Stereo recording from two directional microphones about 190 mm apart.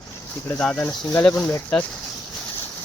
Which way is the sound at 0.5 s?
5° left (ahead or behind).